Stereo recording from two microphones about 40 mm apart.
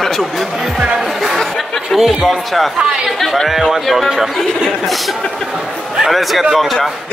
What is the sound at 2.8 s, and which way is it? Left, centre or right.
Speech, centre.